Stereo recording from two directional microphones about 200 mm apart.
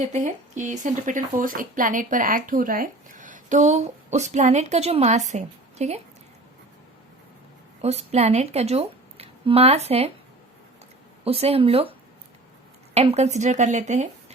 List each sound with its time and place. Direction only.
0.0 s speech: 40° right (ahead or behind)
7.8 s speech: 35° right (ahead or behind)
11.2 s speech: 30° right (ahead or behind)